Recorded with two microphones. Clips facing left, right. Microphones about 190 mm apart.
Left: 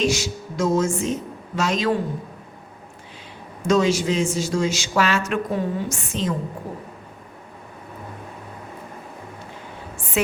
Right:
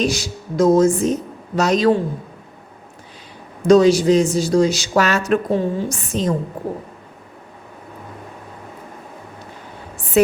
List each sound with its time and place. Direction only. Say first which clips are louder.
0.0 s a man's voice: right 1 dB; 35° right (ahead or behind)
3.6 s a man's voice: right 7 dB; 35° right (ahead or behind)